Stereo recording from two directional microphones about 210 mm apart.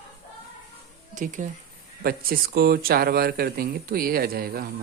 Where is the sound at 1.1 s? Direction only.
35° right (ahead or behind).